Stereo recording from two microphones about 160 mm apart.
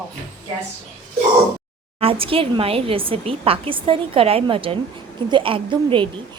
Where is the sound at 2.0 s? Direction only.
35° right (ahead or behind).